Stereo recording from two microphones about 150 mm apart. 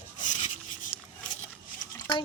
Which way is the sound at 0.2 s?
50° left (ahead or behind).